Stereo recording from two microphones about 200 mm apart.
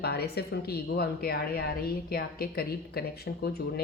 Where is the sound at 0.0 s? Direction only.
55° left (ahead or behind).